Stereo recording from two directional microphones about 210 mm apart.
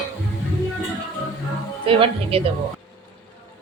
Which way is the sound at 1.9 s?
25° right (ahead or behind).